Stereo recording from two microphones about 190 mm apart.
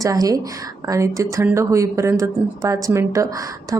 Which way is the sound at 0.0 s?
20° right (ahead or behind).